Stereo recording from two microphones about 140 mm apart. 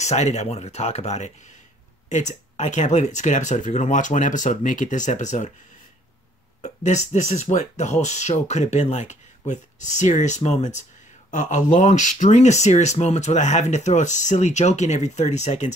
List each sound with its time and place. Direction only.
0.0 s speech: 55° left (ahead or behind)
6.6 s speech: 55° left (ahead or behind)